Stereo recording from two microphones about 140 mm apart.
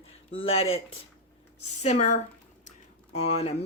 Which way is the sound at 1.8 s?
60° left (ahead or behind).